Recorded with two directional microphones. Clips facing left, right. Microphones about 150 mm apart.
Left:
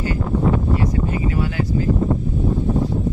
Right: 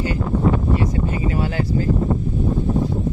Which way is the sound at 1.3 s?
35° right (ahead or behind).